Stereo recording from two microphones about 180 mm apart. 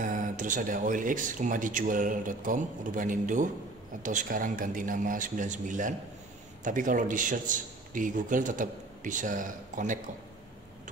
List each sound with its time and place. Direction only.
0.0 s speech: 45° right (ahead or behind)